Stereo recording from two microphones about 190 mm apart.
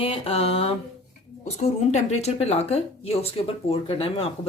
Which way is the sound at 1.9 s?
35° left (ahead or behind).